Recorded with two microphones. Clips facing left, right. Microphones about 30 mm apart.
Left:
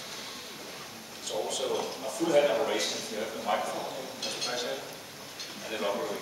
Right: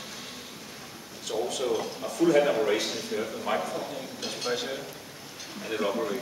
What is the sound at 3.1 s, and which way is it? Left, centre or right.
A man's voice, centre.